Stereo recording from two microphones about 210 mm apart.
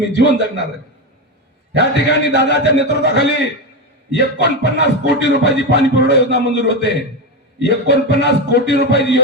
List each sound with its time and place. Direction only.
0.0 s music: 55° left (ahead or behind)
2.0 s a man's voice: 55° left (ahead or behind)
4.1 s music: 55° left (ahead or behind)